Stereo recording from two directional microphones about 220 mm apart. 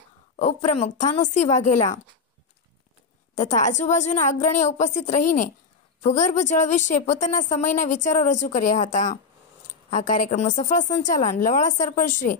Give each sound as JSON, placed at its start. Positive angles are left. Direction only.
{"t": 0.4, "sound": "a woman's voice", "side_deg": 30}
{"t": 3.3, "sound": "a woman's voice", "side_deg": 35}